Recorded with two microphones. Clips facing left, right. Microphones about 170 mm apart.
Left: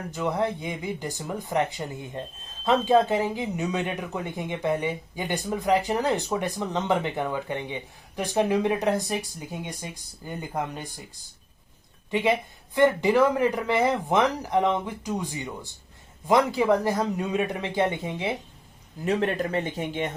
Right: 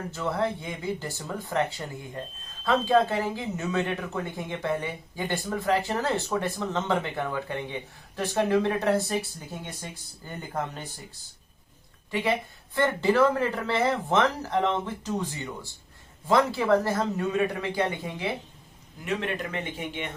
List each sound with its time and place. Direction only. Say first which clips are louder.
0.1 s speech: left 2 dB; 15° left (ahead or behind)
12.1 s speech: left 3 dB; 20° left (ahead or behind)
19.0 s speech: left 5 dB; 35° left (ahead or behind)